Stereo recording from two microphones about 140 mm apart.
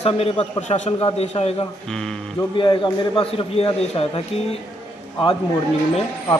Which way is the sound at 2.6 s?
35° left (ahead or behind).